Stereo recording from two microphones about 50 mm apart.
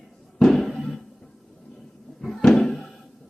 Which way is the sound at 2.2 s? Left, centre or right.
Centre.